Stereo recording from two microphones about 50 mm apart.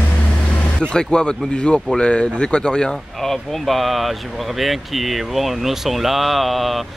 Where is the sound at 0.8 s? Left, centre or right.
Centre.